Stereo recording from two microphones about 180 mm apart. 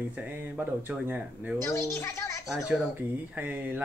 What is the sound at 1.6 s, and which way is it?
Speech, 15° left (ahead or behind).